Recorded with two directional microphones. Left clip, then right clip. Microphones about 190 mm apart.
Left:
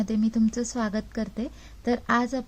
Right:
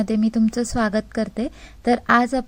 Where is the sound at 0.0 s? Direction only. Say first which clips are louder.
Right 5 dB; 15° right (ahead or behind).